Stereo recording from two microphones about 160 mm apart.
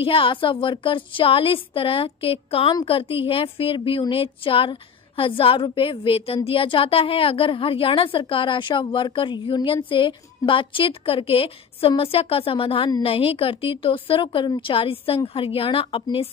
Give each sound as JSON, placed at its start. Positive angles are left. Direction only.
{"t": 0.0, "sound": "a woman's voice", "side_deg": 35}